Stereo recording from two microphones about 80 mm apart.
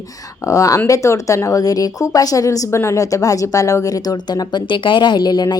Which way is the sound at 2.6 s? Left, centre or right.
Left.